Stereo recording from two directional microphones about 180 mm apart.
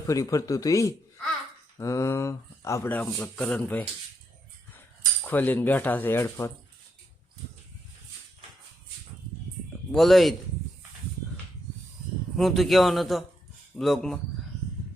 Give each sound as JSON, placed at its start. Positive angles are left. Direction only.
{"t": 0.1, "sound": "speech", "side_deg": 20}
{"t": 5.3, "sound": "speech", "side_deg": 10}
{"t": 9.9, "sound": "a man's voice", "side_deg": 0}
{"t": 12.4, "sound": "a man's voice", "side_deg": 0}